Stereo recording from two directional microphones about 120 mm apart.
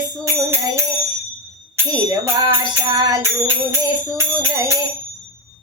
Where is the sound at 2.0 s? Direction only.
35° right (ahead or behind).